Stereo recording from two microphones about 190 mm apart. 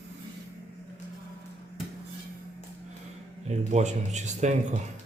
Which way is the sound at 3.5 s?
40° right (ahead or behind).